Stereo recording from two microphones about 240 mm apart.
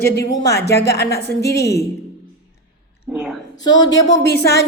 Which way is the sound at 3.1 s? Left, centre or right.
Centre.